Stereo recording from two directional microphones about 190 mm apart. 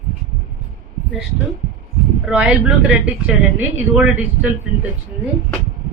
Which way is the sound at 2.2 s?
5° right (ahead or behind).